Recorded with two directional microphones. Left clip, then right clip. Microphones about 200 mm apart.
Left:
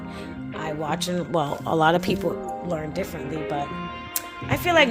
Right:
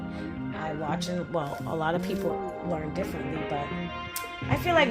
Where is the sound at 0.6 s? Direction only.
50° left (ahead or behind).